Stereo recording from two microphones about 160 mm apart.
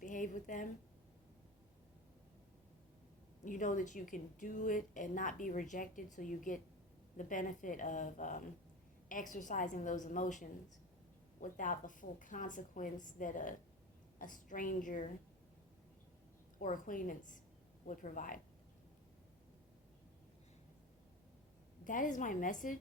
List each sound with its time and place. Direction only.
0.0 s a woman's voice: 55° left (ahead or behind)
3.4 s a woman's voice: 55° left (ahead or behind)
16.6 s a woman's voice: 55° left (ahead or behind)
21.8 s a woman's voice: 55° left (ahead or behind)